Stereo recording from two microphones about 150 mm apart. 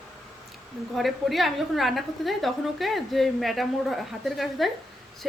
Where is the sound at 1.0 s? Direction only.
Centre (ahead or behind).